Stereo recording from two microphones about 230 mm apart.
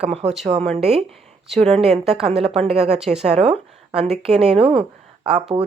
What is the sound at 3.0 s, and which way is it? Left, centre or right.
Speech, centre.